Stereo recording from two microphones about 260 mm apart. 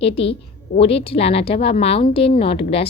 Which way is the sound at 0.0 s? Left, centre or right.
Left.